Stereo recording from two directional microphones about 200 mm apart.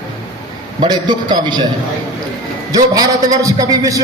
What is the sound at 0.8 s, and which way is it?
Speech, 20° right (ahead or behind).